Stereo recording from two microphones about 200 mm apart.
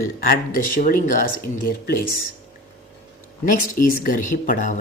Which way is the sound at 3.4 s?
40° left (ahead or behind).